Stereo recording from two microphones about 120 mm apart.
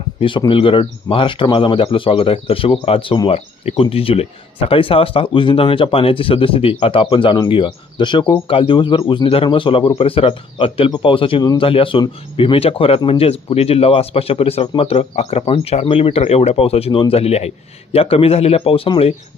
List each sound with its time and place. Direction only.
0.2 s speech: 45° left (ahead or behind)